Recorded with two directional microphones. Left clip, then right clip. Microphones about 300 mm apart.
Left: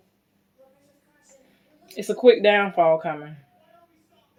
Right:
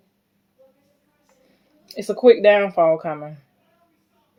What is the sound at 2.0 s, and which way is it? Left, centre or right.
Speech, right.